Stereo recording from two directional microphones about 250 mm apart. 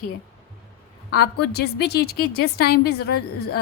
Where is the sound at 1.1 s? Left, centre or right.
Left.